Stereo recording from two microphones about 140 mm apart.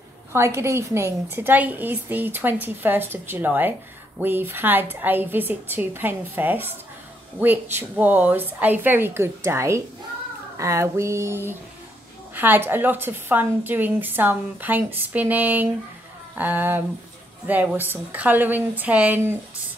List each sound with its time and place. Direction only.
0.3 s a woman's voice: 20° right (ahead or behind)
10.6 s a sound: 20° right (ahead or behind)
12.4 s a woman's voice: 15° right (ahead or behind)